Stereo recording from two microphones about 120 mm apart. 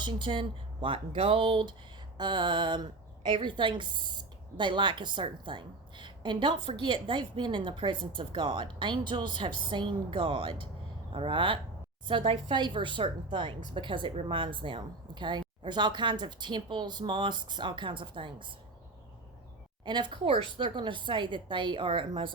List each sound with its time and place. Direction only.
0.0 s a woman's voice: 45° right (ahead or behind)
19.8 s a woman's voice: 40° right (ahead or behind)